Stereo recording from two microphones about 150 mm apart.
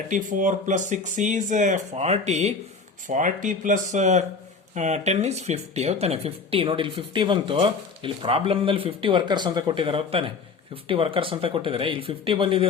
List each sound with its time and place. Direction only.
0.1 s speech: 60° right (ahead or behind)
3.1 s speech: 60° right (ahead or behind); by 12.6 s 35° right (ahead or behind)